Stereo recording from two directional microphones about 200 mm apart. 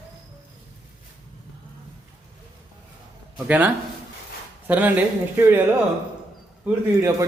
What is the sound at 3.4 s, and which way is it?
Speech, 10° right (ahead or behind).